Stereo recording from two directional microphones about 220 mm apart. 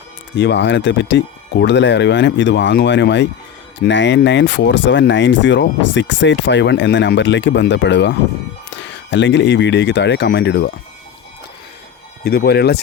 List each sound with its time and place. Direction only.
0.3 s speech: 55° left (ahead or behind)
12.2 s speech: 45° left (ahead or behind)